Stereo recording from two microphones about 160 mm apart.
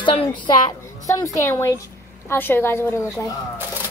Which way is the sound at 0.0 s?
35° left (ahead or behind).